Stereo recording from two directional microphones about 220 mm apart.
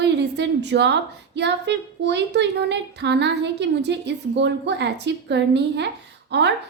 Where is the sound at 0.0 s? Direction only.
50° right (ahead or behind).